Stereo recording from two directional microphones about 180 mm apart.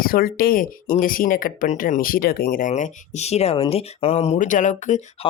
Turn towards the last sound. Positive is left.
turn(degrees=40)  # may be behind; listen again after turning